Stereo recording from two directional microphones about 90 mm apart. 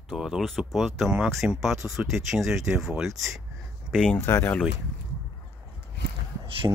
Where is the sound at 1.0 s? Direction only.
10° right (ahead or behind).